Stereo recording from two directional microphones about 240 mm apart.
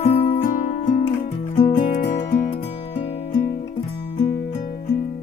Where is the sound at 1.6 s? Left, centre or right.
Left.